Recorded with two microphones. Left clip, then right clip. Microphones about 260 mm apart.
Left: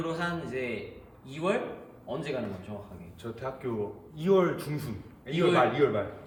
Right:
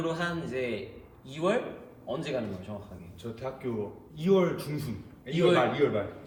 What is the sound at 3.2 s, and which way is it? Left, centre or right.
Speech, centre.